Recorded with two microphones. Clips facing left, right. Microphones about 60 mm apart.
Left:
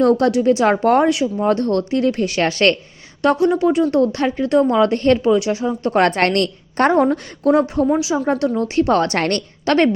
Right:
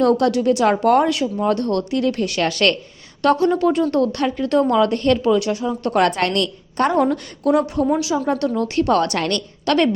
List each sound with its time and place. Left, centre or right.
0.0 s speech: left
3.2 s speech: centre
4.0 s speech: left
5.2 s speech: centre
6.0 s a woman's voice: left
7.0 s speech: left
7.9 s a woman's voice: centre